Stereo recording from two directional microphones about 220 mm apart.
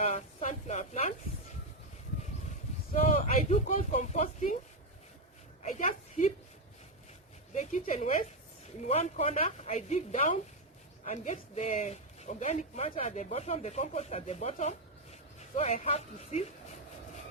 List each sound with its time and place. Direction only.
0.0 s a sound: 30° left (ahead or behind)
2.9 s speech: 35° left (ahead or behind)
5.7 s a woman's voice: 35° left (ahead or behind)
7.5 s a woman's voice: 35° left (ahead or behind)